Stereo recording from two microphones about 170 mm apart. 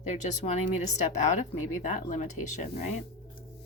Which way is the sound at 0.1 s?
45° left (ahead or behind).